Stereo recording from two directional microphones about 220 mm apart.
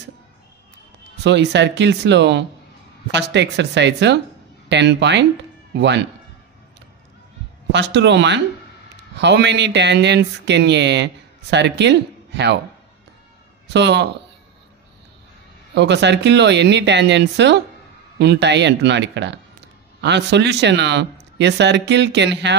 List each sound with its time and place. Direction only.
1.2 s speech: 50° right (ahead or behind)
7.7 s speech: 55° right (ahead or behind)
13.7 s speech: 50° right (ahead or behind)
15.7 s speech: 50° right (ahead or behind)